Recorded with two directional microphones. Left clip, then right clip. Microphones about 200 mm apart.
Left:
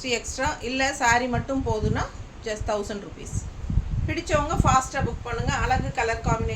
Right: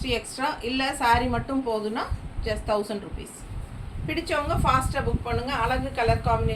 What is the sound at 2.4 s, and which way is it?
Speech, 20° left (ahead or behind).